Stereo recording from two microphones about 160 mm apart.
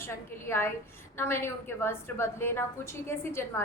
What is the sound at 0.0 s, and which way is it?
A woman's voice, 15° left (ahead or behind).